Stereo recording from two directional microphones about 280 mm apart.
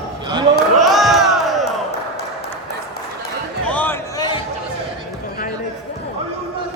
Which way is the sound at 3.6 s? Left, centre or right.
Centre.